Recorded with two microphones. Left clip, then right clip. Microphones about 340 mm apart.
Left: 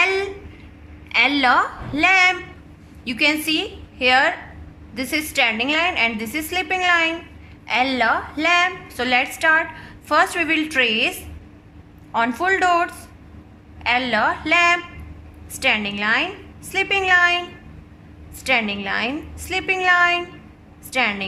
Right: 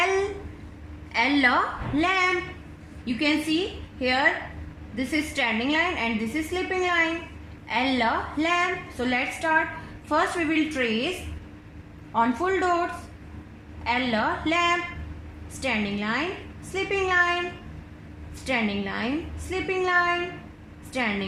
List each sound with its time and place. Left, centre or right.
1.1 s a woman's voice: left
12.1 s a woman's voice: left
13.8 s a woman's voice: left
18.4 s a woman's voice: left